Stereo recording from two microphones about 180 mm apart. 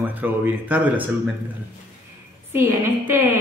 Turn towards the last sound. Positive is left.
turn(degrees=-15)  # may be behind; listen again after turning